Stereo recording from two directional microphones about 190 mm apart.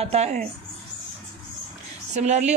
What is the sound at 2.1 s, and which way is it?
Speech, 35° right (ahead or behind).